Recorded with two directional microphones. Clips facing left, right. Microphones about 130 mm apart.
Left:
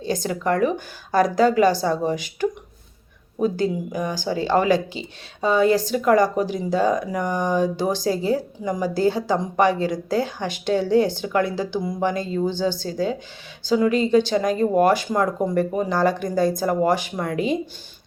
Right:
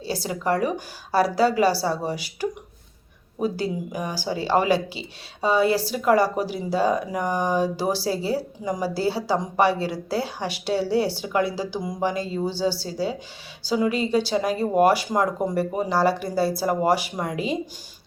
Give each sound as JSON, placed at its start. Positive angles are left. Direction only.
{"t": 0.1, "sound": "speech", "side_deg": -10}
{"t": 5.4, "sound": "speech", "side_deg": -10}